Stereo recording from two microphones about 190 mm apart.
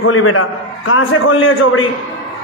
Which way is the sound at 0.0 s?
90° left.